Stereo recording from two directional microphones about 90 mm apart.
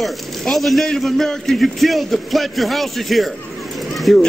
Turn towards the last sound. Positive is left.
turn(degrees=0)  # may be behind; listen again after turning